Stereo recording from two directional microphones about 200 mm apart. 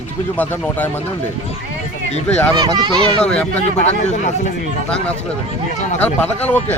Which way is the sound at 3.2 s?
5° left (ahead or behind).